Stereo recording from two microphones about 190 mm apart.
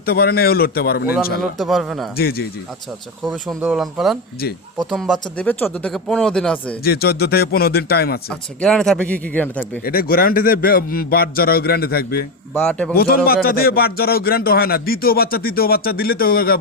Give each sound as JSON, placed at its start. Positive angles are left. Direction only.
{"t": 0.0, "sound": "speech", "side_deg": 55}
{"t": 1.4, "sound": "speech", "side_deg": 0}
{"t": 2.1, "sound": "speech", "side_deg": 55}
{"t": 3.2, "sound": "speech", "side_deg": 0}
{"t": 6.8, "sound": "a man's voice", "side_deg": 55}
{"t": 8.3, "sound": "speech", "side_deg": 5}
{"t": 9.8, "sound": "speech", "side_deg": 50}
{"t": 12.5, "sound": "speech", "side_deg": 5}
{"t": 12.9, "sound": "speech", "side_deg": 55}